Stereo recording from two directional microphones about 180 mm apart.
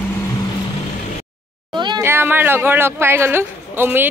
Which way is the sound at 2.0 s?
15° right (ahead or behind).